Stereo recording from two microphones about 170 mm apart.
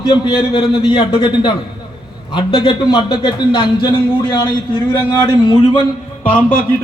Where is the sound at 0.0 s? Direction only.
30° left (ahead or behind).